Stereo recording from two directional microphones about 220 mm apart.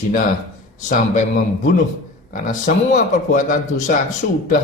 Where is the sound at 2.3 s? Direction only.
35° left (ahead or behind).